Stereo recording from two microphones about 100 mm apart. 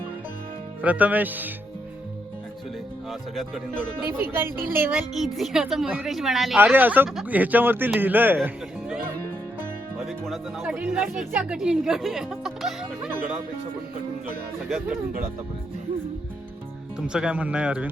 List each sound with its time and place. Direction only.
0.8 s speech: 15° right (ahead or behind)
3.1 s speech: centre (ahead or behind)
4.3 s a man's voice: 20° right (ahead or behind)
5.1 s speech: centre (ahead or behind)
6.6 s a man's voice: 20° right (ahead or behind)
8.4 s music: 20° right (ahead or behind)
10.1 s speech: centre (ahead or behind)
17.0 s speech: 10° right (ahead or behind)